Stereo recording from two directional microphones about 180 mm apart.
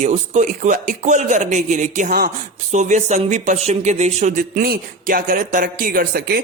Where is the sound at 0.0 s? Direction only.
40° right (ahead or behind).